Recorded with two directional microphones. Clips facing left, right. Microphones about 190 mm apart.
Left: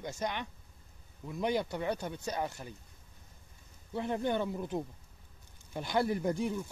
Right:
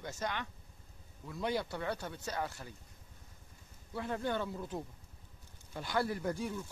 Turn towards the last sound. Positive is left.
turn(degrees=20)  # may be behind; listen again after turning